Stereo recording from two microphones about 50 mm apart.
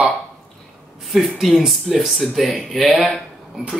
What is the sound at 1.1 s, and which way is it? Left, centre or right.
Speech, centre.